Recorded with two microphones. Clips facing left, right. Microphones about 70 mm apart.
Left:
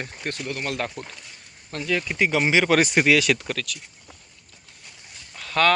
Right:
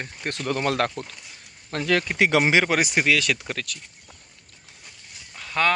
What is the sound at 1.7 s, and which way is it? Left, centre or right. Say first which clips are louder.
Speech: right 3 dB; right.